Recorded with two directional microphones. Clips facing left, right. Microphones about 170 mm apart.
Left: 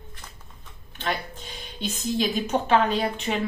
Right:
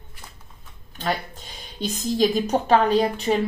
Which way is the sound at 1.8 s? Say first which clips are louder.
Right 5 dB; 40° right (ahead or behind).